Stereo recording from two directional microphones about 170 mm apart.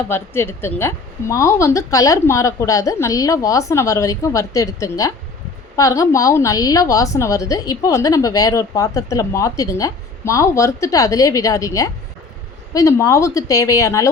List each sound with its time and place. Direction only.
0.1 s a woman's voice: 15° left (ahead or behind)